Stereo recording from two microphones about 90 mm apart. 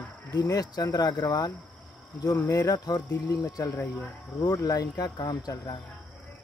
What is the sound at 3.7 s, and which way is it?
Speech, 25° left (ahead or behind).